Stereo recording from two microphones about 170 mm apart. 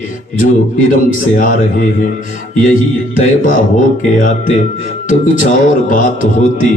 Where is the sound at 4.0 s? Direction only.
50° left (ahead or behind).